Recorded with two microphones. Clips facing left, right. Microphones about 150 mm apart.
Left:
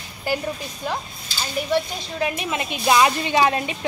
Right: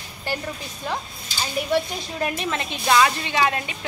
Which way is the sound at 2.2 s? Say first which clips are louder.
Left 1 dB; 10° left (ahead or behind).